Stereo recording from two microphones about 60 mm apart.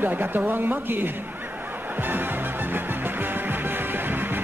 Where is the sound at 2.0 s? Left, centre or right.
Right.